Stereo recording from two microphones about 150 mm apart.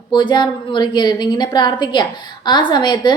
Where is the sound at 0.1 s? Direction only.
30° left (ahead or behind).